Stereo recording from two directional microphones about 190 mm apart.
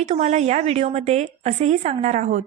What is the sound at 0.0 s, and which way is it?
Speech, 35° right (ahead or behind).